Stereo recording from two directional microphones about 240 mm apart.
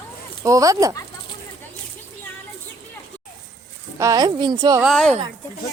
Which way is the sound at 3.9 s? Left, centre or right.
Centre.